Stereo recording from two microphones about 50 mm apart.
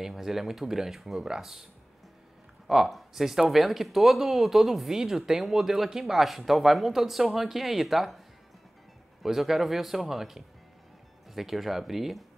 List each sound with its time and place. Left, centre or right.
0.0 s speech: centre
2.7 s speech: centre
9.2 s speech: centre